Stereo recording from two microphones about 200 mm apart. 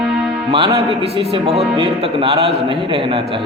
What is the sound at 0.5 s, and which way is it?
Speech, 25° right (ahead or behind).